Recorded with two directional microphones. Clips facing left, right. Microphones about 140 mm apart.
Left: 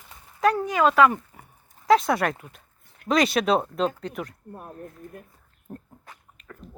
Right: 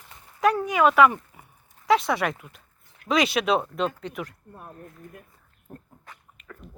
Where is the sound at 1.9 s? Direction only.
45° left (ahead or behind).